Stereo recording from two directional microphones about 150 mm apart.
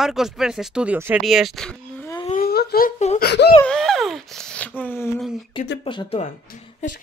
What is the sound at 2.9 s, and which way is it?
Speech, 50° left (ahead or behind).